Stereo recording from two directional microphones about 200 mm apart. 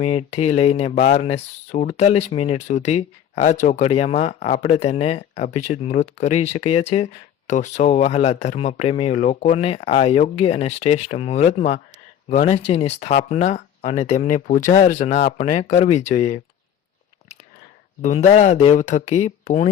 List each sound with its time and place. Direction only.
0.0 s speech: 30° left (ahead or behind)
18.0 s speech: 35° left (ahead or behind)